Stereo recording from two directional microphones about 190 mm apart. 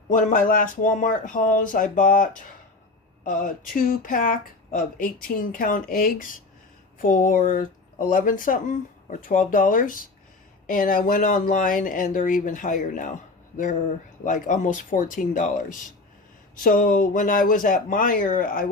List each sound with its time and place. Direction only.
0.1 s speech: 45° left (ahead or behind)
14.3 s speech: 40° left (ahead or behind)